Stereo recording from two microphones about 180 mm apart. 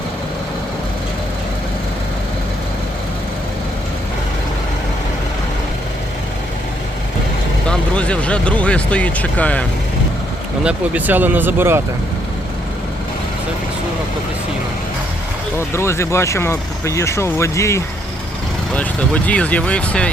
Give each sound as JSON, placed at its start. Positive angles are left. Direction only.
{"t": 7.7, "sound": "speech", "side_deg": 5}
{"t": 10.6, "sound": "speech", "side_deg": -5}
{"t": 15.5, "sound": "speech", "side_deg": 15}